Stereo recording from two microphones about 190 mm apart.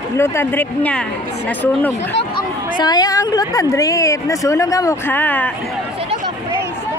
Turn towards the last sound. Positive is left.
turn(degrees=10)  # may be behind; listen again after turning